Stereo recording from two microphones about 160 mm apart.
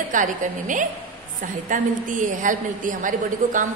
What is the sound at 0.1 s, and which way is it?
A woman's voice, 55° right (ahead or behind).